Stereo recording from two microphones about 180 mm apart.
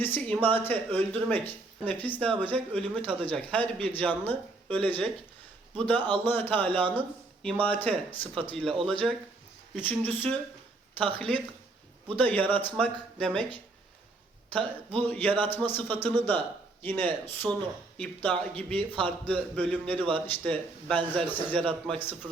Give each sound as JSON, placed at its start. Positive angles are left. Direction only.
{"t": 0.0, "sound": "a man's voice", "side_deg": 10}
{"t": 14.6, "sound": "a man's voice", "side_deg": -30}
{"t": 15.0, "sound": "a man's voice", "side_deg": 10}
{"t": 20.0, "sound": "a man's voice", "side_deg": -30}
{"t": 20.2, "sound": "a man's voice", "side_deg": 10}